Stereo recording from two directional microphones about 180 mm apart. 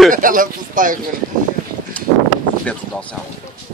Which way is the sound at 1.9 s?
5° left (ahead or behind).